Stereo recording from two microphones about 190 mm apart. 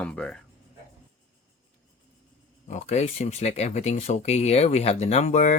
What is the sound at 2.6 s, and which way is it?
Speech, 40° left (ahead or behind).